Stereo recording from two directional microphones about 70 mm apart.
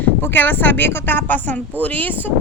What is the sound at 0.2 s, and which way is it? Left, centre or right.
Speech, left.